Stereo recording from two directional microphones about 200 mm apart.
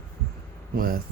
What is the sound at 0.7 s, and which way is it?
Speech, 45° right (ahead or behind).